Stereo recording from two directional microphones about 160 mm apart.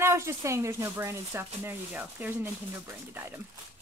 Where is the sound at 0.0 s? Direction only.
15° right (ahead or behind).